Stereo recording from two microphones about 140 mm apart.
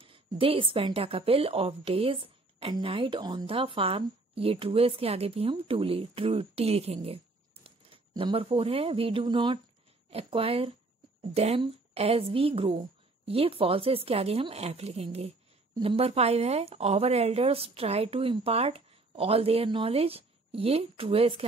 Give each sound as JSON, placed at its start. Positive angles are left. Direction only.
{"t": 0.0, "sound": "a woman's voice", "side_deg": -40}